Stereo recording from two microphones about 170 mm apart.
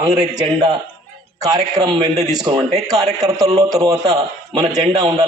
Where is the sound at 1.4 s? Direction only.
20° right (ahead or behind).